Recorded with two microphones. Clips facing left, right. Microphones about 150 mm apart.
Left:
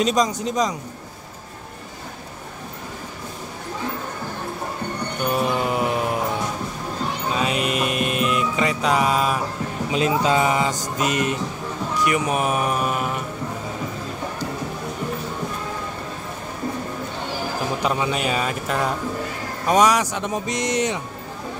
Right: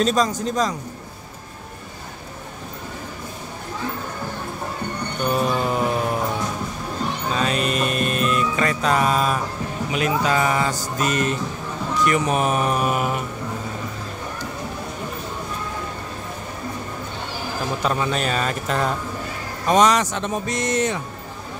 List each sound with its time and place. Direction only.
0.0 s speech: 15° left (ahead or behind)
5.2 s music: 10° left (ahead or behind)
7.3 s music: 15° left (ahead or behind)
9.8 s speech: 25° left (ahead or behind); by 12.8 s 5° left (ahead or behind)
12.8 s mantra: 5° right (ahead or behind)
17.8 s speech: 10° left (ahead or behind)